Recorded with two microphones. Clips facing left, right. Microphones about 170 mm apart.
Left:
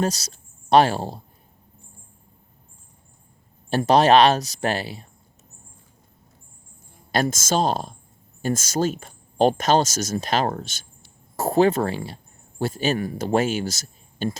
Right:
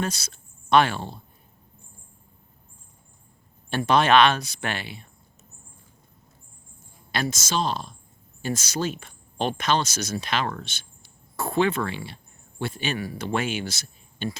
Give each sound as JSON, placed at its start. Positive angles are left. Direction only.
{"t": 0.0, "sound": "speech", "side_deg": 40}
{"t": 3.7, "sound": "speech", "side_deg": 35}
{"t": 7.1, "sound": "speech", "side_deg": 45}